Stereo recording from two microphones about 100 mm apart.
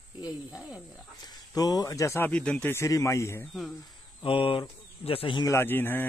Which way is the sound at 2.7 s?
30° left (ahead or behind).